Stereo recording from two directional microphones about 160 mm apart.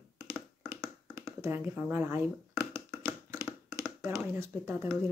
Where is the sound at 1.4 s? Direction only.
15° right (ahead or behind).